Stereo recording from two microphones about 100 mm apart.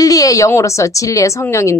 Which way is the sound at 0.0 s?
35° left (ahead or behind).